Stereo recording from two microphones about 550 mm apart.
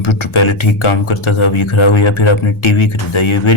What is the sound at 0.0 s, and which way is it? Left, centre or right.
Speech, left.